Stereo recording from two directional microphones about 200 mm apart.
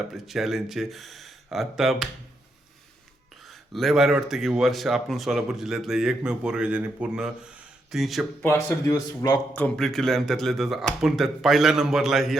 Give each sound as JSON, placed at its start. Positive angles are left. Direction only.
{"t": 0.1, "sound": "speech", "side_deg": 0}
{"t": 3.4, "sound": "speech", "side_deg": 0}
{"t": 8.4, "sound": "speech", "side_deg": 15}
{"t": 9.6, "sound": "speech", "side_deg": 5}